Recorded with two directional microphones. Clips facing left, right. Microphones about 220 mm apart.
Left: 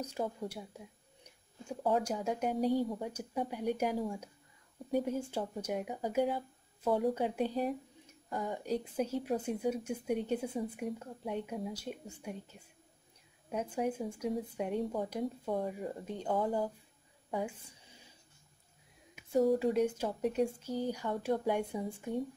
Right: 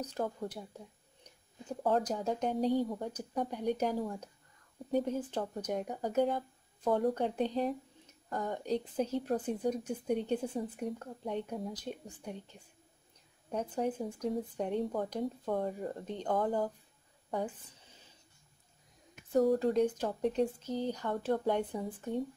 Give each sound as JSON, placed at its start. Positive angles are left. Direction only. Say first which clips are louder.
{"t": 0.0, "sound": "a woman's voice", "louder": "right 1 dB", "side_deg": 10}
{"t": 17.3, "sound": "a sound", "louder": "right 1 dB", "side_deg": 10}
{"t": 19.1, "sound": "a woman's voice", "louder": "right 1 dB", "side_deg": 0}